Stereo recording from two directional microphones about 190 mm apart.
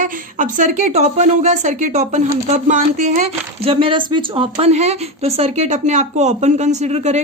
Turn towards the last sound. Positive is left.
turn(degrees=-35)  # may be behind; listen again after turning